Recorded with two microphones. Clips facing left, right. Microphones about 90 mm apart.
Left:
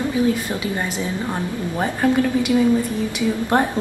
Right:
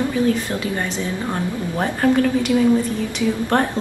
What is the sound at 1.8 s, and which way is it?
A woman's voice, 5° left (ahead or behind).